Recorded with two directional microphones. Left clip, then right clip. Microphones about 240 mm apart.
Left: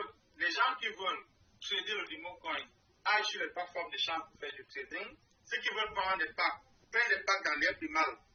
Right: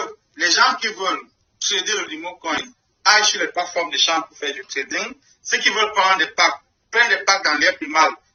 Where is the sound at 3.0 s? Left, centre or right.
Right.